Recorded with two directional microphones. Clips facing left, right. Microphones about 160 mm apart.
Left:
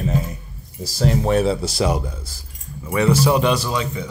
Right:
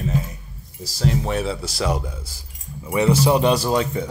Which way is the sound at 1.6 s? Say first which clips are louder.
Left 5 dB; 25° left (ahead or behind).